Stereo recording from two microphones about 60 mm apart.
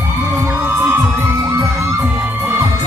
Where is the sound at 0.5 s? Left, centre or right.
Right.